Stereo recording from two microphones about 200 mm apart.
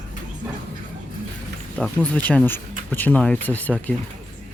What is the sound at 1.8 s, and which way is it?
Speech, 5° left (ahead or behind).